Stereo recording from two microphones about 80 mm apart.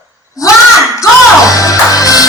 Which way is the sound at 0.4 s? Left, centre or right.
Left.